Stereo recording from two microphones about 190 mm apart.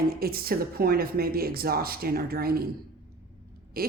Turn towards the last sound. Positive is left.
turn(degrees=-50)  # may be behind; listen again after turning